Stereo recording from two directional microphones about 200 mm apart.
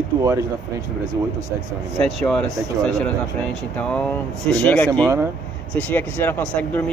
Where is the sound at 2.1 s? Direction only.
Centre (ahead or behind).